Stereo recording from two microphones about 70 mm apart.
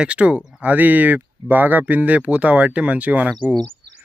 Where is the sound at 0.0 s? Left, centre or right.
Centre.